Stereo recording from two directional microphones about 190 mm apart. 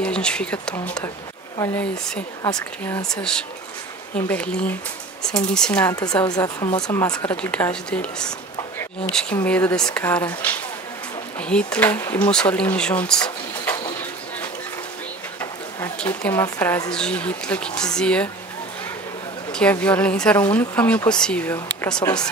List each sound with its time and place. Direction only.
0.0 s speech: 5° left (ahead or behind)
6.2 s speech: 20° left (ahead or behind)
15.8 s speech: 10° left (ahead or behind)
19.5 s speech: 5° left (ahead or behind)